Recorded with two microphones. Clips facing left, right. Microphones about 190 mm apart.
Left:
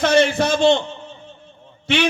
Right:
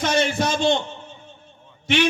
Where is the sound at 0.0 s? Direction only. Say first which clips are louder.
Left 5 dB; 60° left (ahead or behind).